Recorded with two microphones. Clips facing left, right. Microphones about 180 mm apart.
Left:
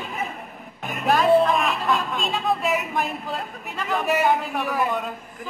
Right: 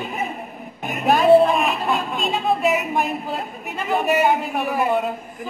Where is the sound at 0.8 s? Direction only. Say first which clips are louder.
Right 4 dB; 15° right (ahead or behind).